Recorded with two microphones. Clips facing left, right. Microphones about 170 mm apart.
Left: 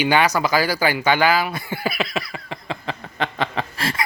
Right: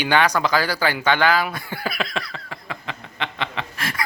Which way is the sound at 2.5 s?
25° left (ahead or behind).